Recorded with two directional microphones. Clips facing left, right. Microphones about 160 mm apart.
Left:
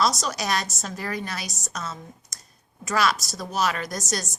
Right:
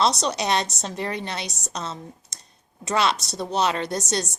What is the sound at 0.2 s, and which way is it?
A woman's voice, 25° right (ahead or behind).